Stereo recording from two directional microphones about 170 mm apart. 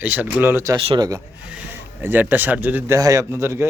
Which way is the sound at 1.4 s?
10° right (ahead or behind).